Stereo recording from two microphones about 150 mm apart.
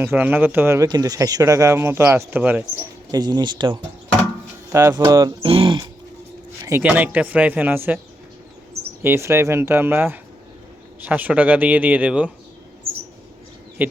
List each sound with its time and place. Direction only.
0.0 s speech: 15° right (ahead or behind)
3.1 s speech: 25° right (ahead or behind)
4.7 s speech: 20° right (ahead or behind)
5.5 s speech: 35° right (ahead or behind)
6.7 s speech: 15° right (ahead or behind)
9.0 s speech: 15° right (ahead or behind)
13.8 s speech: 10° right (ahead or behind)